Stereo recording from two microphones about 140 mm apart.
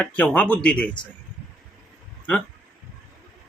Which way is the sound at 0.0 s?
10° left (ahead or behind).